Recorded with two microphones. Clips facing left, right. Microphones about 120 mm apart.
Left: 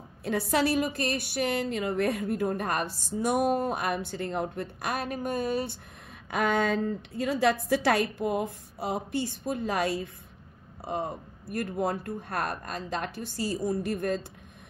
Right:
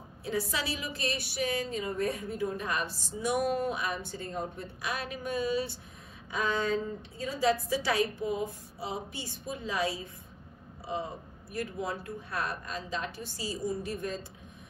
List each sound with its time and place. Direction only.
0.2 s a woman's voice: 60° left (ahead or behind)
4.8 s a woman's voice: 50° left (ahead or behind)
6.3 s a woman's voice: 65° left (ahead or behind)